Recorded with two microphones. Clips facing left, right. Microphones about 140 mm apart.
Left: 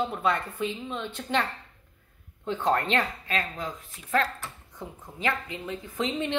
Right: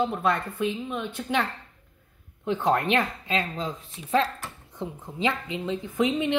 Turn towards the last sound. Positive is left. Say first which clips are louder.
# right 6 dB
turn(degrees=-20)  # may be behind; listen again after turning